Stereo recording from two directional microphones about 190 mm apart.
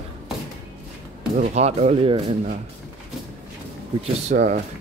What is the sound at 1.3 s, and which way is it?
Speech, 35° right (ahead or behind).